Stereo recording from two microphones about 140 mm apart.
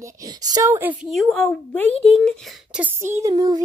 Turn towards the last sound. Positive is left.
turn(degrees=-30)  # may be behind; listen again after turning